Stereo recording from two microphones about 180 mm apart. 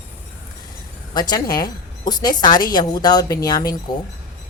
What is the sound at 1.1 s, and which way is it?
Speech, 20° left (ahead or behind).